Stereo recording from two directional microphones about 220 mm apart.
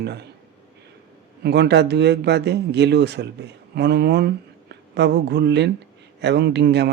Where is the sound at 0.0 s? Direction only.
50° right (ahead or behind).